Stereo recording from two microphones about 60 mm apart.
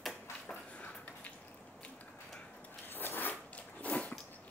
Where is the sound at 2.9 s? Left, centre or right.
Left.